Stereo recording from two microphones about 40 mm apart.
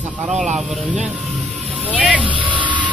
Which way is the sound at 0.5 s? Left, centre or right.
Centre.